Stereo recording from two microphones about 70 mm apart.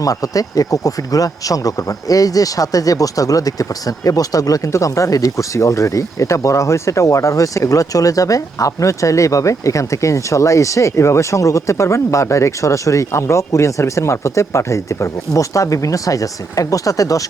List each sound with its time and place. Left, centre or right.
0.0 s speech: left